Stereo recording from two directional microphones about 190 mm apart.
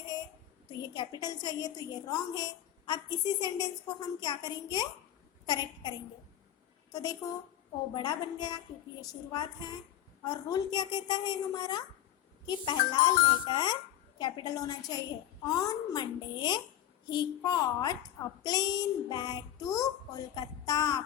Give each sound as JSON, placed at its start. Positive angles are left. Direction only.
{"t": 0.7, "sound": "a woman's voice", "side_deg": 20}
{"t": 6.9, "sound": "a woman's voice", "side_deg": 20}